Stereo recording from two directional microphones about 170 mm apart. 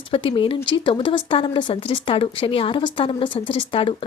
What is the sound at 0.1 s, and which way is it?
A woman's voice, 30° left (ahead or behind).